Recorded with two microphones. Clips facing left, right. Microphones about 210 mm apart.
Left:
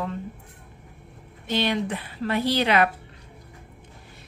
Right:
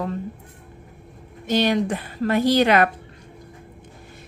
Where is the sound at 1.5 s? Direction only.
45° right (ahead or behind).